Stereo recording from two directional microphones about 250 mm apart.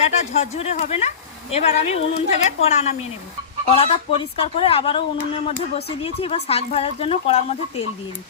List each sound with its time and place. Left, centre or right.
0.3 s speech: left